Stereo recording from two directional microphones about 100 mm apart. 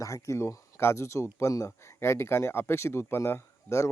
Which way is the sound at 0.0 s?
30° left (ahead or behind).